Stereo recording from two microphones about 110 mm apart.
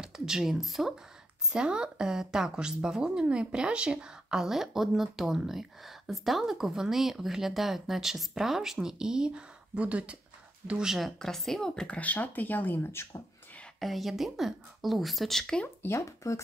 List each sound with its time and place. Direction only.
0.0 s speech: 5° right (ahead or behind); by 13.2 s 25° left (ahead or behind)
13.7 s speech: centre (ahead or behind)
15.8 s speech: 25° left (ahead or behind)